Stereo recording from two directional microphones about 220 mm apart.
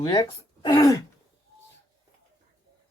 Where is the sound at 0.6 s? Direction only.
15° left (ahead or behind).